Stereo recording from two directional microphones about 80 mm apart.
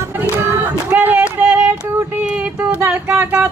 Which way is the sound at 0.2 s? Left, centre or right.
Right.